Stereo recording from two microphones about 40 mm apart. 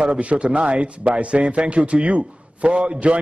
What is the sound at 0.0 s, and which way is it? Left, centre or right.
A man's voice, right.